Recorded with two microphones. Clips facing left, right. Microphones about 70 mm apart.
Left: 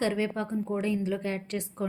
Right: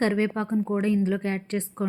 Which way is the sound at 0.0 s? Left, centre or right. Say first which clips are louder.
Right 4 dB; right.